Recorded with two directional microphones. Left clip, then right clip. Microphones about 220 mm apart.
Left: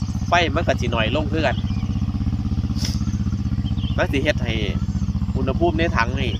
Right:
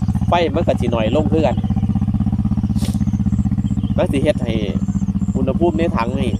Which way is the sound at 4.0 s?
15° right (ahead or behind).